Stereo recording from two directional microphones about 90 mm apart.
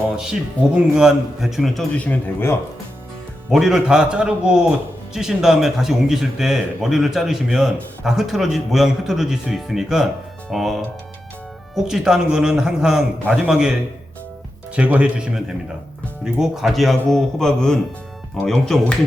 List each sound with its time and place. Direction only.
0.9 s a man's voice: 5° right (ahead or behind)
2.0 s speech: 20° left (ahead or behind)
3.5 s a man's voice: 5° right (ahead or behind)
14.8 s a man's voice: 15° right (ahead or behind); by 18.9 s 5° left (ahead or behind)